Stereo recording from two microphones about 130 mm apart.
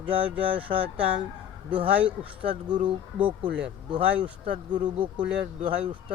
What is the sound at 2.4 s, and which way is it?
Speech, 40° right (ahead or behind).